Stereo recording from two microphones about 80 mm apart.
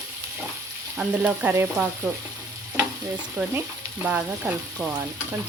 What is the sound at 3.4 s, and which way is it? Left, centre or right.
Stir, centre.